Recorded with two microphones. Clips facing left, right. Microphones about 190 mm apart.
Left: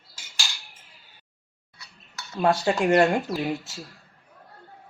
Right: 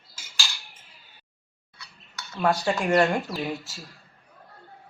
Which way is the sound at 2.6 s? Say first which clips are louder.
Left 3 dB; 20° left (ahead or behind).